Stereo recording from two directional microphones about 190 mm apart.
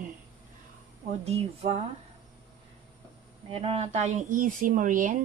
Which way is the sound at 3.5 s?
30° right (ahead or behind).